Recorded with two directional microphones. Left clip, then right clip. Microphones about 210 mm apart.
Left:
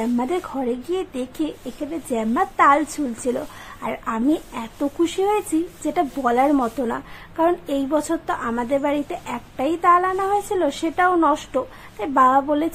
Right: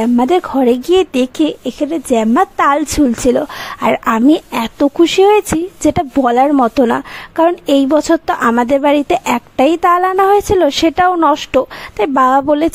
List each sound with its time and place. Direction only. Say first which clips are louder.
0.0 s a woman's voice: right 11 dB; 35° right (ahead or behind)